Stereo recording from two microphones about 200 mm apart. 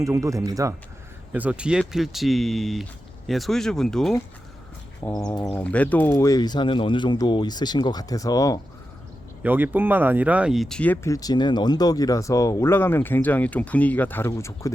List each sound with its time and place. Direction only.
0.0 s speech: 15° right (ahead or behind); by 4.1 s centre (ahead or behind)
5.2 s speech: 20° left (ahead or behind)
5.5 s speech: 5° left (ahead or behind)
9.4 s speech: 10° right (ahead or behind); by 14.7 s 15° left (ahead or behind)